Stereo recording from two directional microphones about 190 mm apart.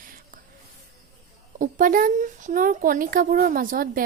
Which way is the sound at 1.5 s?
45° right (ahead or behind).